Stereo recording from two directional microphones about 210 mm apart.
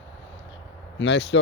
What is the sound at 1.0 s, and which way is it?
Speech, 55° left (ahead or behind).